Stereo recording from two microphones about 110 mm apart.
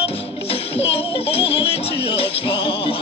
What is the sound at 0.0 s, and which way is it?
Music, 60° left (ahead or behind).